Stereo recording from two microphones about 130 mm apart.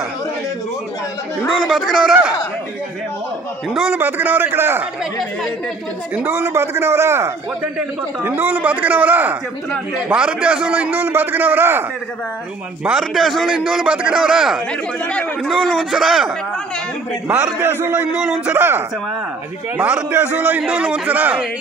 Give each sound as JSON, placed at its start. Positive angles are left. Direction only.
{"t": 1.7, "sound": "a man's voice", "side_deg": 0}
{"t": 3.7, "sound": "a man's voice", "side_deg": -5}
{"t": 4.0, "sound": "a man's voice", "side_deg": -15}
{"t": 6.1, "sound": "a man's voice", "side_deg": -15}
{"t": 12.8, "sound": "a man's voice", "side_deg": -5}
{"t": 14.7, "sound": "a man's voice", "side_deg": 10}
{"t": 17.3, "sound": "a man's voice", "side_deg": -10}
{"t": 18.1, "sound": "a man's voice", "side_deg": -5}